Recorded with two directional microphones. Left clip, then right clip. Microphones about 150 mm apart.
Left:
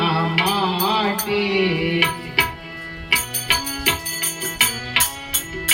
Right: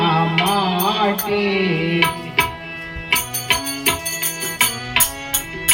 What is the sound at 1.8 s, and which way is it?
Music, 35° left (ahead or behind).